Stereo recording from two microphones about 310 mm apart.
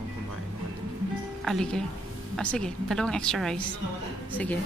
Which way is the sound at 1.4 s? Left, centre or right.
Centre.